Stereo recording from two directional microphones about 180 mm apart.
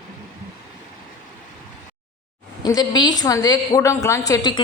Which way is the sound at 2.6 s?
20° left (ahead or behind).